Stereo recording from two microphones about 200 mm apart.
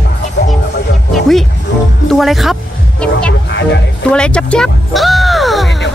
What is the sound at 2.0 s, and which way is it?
A woman's voice, centre (ahead or behind).